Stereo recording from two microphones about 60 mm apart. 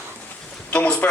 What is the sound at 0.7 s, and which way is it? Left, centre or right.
Speech, left.